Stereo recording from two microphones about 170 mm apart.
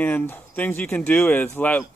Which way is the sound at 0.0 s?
10° left (ahead or behind).